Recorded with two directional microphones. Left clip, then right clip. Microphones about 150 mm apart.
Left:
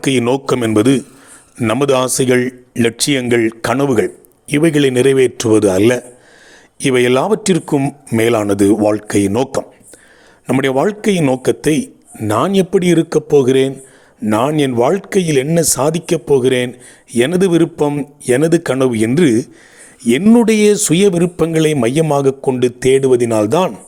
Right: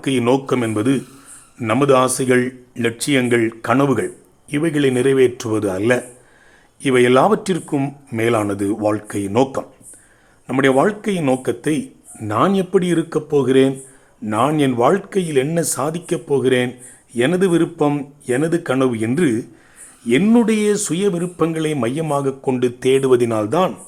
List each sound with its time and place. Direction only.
0.0 s speech: 50° left (ahead or behind)
12.3 s speech: 50° left (ahead or behind)
22.4 s speech: 25° left (ahead or behind)
23.5 s speech: 55° left (ahead or behind)